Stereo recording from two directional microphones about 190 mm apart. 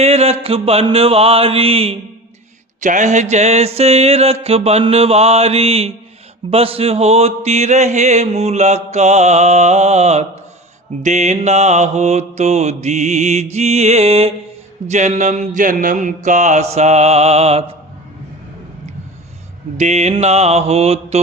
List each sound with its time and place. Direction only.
0.0 s mantra: 30° right (ahead or behind)
2.8 s mantra: 40° right (ahead or behind)
19.7 s mantra: 35° right (ahead or behind)